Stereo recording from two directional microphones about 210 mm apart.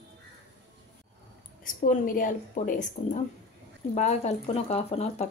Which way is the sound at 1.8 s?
40° left (ahead or behind).